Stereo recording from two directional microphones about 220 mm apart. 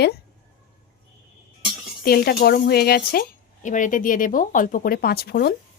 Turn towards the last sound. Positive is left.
turn(degrees=45)  # may be behind; listen again after turning